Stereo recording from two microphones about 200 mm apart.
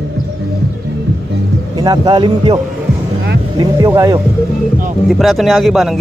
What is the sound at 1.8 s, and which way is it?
A man's voice, 20° right (ahead or behind).